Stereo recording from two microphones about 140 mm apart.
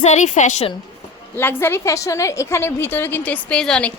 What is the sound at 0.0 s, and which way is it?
Speech, 55° left (ahead or behind).